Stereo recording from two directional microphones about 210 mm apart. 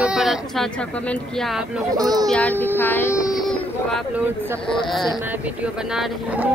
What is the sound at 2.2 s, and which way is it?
Speech, 5° left (ahead or behind).